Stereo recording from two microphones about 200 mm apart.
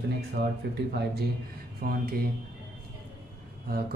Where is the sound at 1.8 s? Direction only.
50° right (ahead or behind).